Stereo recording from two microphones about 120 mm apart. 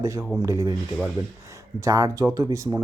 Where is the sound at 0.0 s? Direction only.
25° right (ahead or behind).